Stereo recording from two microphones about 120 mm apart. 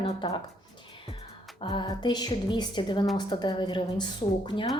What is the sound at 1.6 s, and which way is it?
A woman's voice, 40° left (ahead or behind).